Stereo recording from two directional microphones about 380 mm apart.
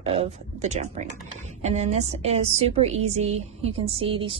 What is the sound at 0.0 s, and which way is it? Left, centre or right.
Speech, centre.